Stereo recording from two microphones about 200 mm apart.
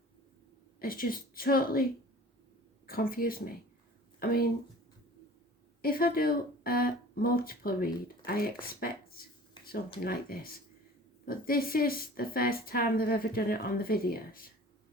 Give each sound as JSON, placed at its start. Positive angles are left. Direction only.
{"t": 0.8, "sound": "speech", "side_deg": 45}
{"t": 2.8, "sound": "speech", "side_deg": 45}
{"t": 5.8, "sound": "speech", "side_deg": 45}
{"t": 9.6, "sound": "a sound", "side_deg": 20}
{"t": 10.0, "sound": "speech", "side_deg": 50}